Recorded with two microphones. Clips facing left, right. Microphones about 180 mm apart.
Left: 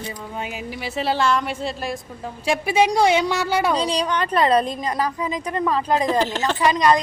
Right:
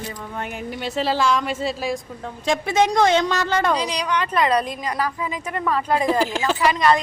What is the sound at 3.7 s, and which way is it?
A woman's voice, 30° left (ahead or behind).